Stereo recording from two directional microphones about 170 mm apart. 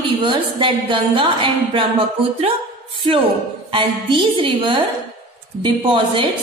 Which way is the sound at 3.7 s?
30° right (ahead or behind).